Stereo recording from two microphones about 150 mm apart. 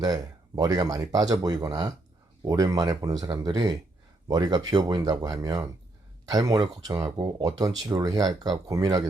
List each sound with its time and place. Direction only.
0.0 s speech: 25° right (ahead or behind)